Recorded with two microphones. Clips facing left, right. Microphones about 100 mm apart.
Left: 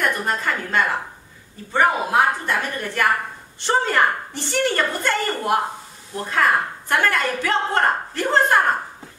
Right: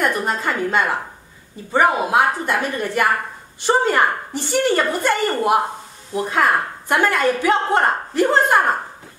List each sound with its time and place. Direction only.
0.0 s a woman's voice: 15° right (ahead or behind)